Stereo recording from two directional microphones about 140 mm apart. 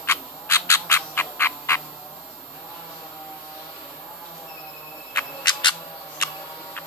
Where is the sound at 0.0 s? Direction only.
20° left (ahead or behind).